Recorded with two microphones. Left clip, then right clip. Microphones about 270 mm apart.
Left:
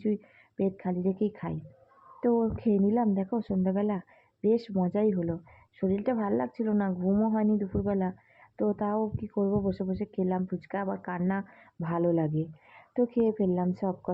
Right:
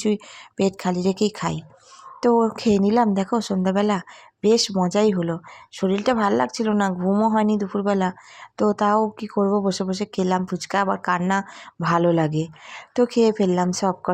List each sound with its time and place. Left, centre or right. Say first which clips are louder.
0.0 s speech: right 8 dB; right
9.3 s speech: right 8 dB; right